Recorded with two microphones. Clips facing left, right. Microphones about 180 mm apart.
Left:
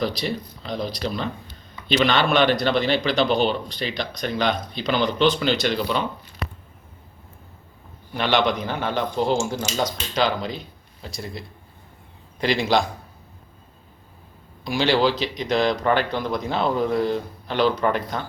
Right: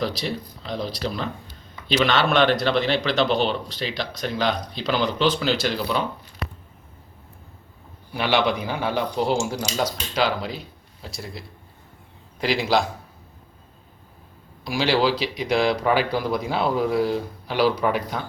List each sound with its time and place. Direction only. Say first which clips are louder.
0.0 s a man's voice: left 1 dB; centre (ahead or behind)
8.1 s a man's voice: even; 10° right (ahead or behind)
14.6 s speech: left 1 dB; 5° right (ahead or behind)